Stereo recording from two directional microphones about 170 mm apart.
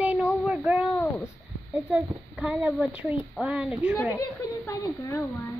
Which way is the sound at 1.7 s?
5° right (ahead or behind).